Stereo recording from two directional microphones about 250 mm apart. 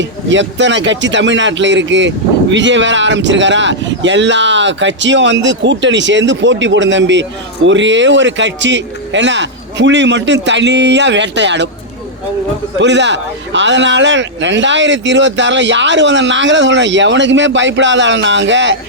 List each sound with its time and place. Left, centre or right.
0.0 s speech: right
12.8 s speech: right